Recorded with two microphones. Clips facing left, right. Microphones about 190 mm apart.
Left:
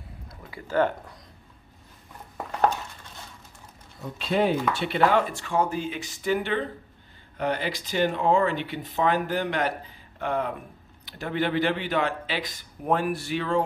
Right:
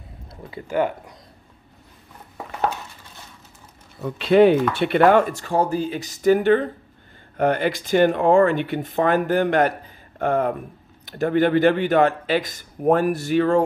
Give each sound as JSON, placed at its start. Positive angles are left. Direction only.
{"t": 0.5, "sound": "speech", "side_deg": -20}
{"t": 4.0, "sound": "speech", "side_deg": -70}